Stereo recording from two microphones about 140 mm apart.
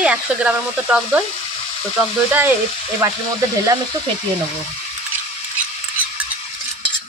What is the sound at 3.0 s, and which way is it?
Frying, 20° right (ahead or behind).